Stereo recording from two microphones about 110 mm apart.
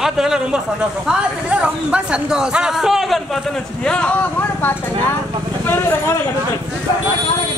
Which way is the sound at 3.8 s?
10° left (ahead or behind).